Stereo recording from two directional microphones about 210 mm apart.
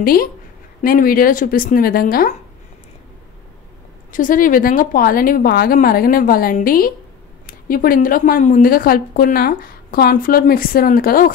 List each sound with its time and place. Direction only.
0.0 s a woman's voice: 45° left (ahead or behind)
4.1 s a woman's voice: 40° left (ahead or behind)